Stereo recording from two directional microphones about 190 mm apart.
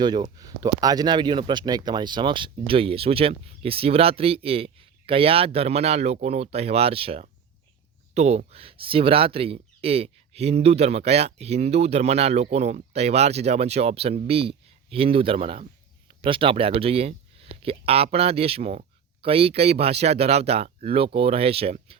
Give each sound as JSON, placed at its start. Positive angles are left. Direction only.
{"t": 0.0, "sound": "speech", "side_deg": -25}